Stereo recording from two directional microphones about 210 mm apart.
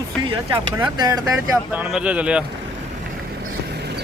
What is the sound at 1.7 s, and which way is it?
Speech, 5° right (ahead or behind).